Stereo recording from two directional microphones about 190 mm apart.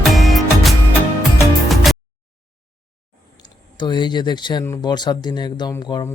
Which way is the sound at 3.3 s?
25° left (ahead or behind).